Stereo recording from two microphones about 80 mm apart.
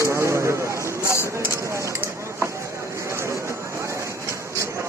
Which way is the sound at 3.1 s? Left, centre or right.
Right.